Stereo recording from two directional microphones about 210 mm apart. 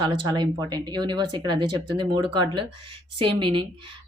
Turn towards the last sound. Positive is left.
turn(degrees=-25)  # may be behind; listen again after turning